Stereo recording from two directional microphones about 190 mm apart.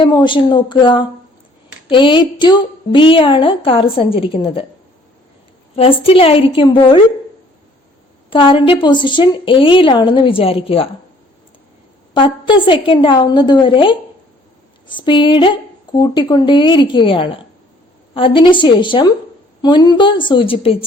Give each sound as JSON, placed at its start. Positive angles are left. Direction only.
{"t": 0.0, "sound": "a woman's voice", "side_deg": 25}
{"t": 5.7, "sound": "a woman's voice", "side_deg": 30}
{"t": 8.3, "sound": "a woman's voice", "side_deg": 25}
{"t": 12.1, "sound": "a woman's voice", "side_deg": 25}